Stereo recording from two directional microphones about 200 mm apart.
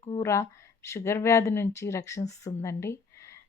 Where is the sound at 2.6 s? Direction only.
15° left (ahead or behind).